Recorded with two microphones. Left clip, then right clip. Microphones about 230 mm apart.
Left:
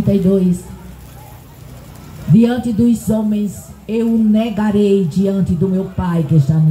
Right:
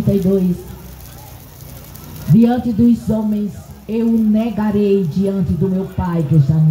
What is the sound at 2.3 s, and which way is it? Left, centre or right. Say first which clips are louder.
Speech: even; left.